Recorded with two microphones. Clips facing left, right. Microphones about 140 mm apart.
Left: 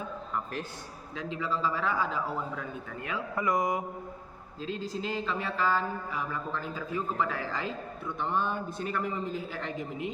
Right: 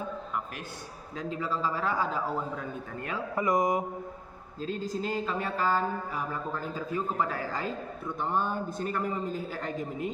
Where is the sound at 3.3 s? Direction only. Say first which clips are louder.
Right 2 dB; 20° right (ahead or behind).